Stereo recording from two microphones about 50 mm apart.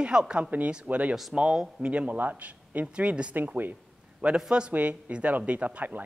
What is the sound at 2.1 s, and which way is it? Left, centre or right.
Speech, right.